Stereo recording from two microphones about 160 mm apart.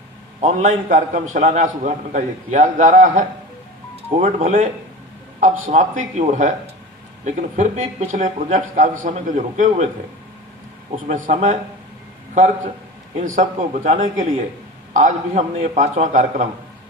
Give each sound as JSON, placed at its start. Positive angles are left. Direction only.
{"t": 0.4, "sound": "a man's voice", "side_deg": -55}
{"t": 11.1, "sound": "a man's voice", "side_deg": -50}
{"t": 14.9, "sound": "a man's voice", "side_deg": -50}